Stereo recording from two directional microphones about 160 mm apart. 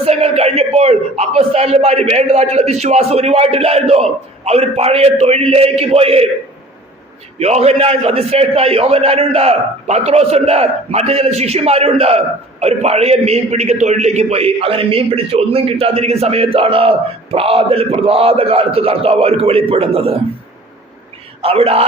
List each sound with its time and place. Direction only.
0.0 s a man's voice: 40° right (ahead or behind)
7.3 s a man's voice: 40° right (ahead or behind)
21.4 s a man's voice: 35° right (ahead or behind)